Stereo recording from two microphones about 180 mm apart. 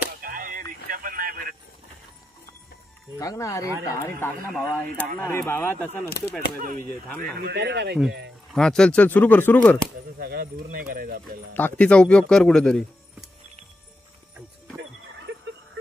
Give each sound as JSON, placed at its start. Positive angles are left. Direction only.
{"t": 0.2, "sound": "a sound", "side_deg": -50}
{"t": 3.2, "sound": "speech", "side_deg": 20}
{"t": 4.5, "sound": "speech", "side_deg": 0}
{"t": 5.2, "sound": "speech", "side_deg": 15}
{"t": 6.0, "sound": "speech", "side_deg": 60}
{"t": 6.6, "sound": "speech", "side_deg": -50}
{"t": 7.3, "sound": "speech", "side_deg": -65}
{"t": 8.5, "sound": "speech", "side_deg": 5}
{"t": 10.1, "sound": "speech", "side_deg": -55}
{"t": 11.5, "sound": "speech", "side_deg": 10}
{"t": 14.8, "sound": "a sound", "side_deg": -85}